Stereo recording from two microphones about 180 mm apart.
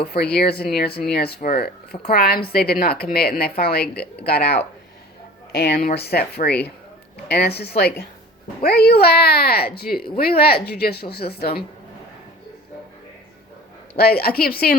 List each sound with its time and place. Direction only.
0.0 s speech: 60° left (ahead or behind)
13.9 s speech: 60° left (ahead or behind)